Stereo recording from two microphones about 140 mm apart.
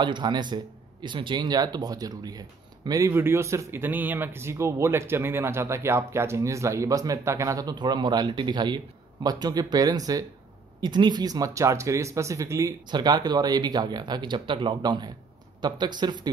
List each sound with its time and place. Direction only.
0.0 s speech: 35° right (ahead or behind)